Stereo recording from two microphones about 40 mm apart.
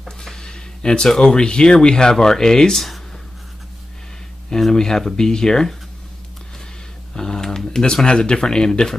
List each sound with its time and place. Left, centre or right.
0.2 s a sound: centre
1.2 s speech: left
4.5 s speech: centre
7.2 s speech: centre